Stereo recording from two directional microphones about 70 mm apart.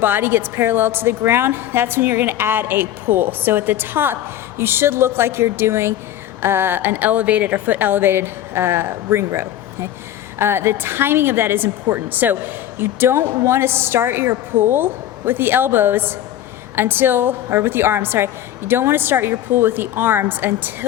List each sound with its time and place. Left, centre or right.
0.0 s speech: right